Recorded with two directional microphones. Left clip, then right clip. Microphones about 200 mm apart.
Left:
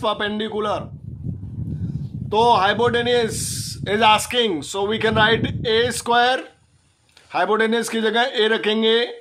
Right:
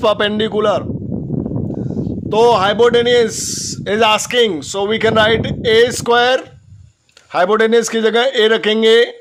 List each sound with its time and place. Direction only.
0.0 s a man's voice: 35° right (ahead or behind)
2.3 s a man's voice: 35° right (ahead or behind)